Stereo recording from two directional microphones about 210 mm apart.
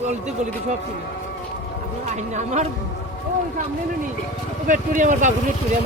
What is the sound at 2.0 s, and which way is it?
Speech, 35° right (ahead or behind).